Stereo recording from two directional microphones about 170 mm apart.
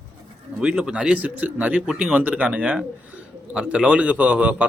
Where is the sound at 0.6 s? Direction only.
5° right (ahead or behind).